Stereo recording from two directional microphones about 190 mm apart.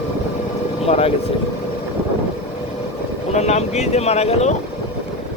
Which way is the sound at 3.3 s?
35° left (ahead or behind).